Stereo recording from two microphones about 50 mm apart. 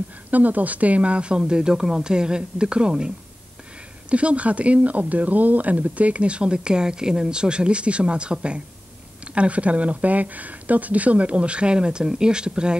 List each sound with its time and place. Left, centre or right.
0.3 s speech: right
4.1 s speech: right